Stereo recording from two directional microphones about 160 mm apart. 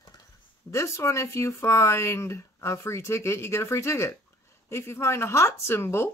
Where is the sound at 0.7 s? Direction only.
20° left (ahead or behind).